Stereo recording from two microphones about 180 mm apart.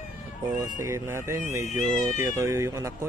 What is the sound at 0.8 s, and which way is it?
Speech, 15° right (ahead or behind).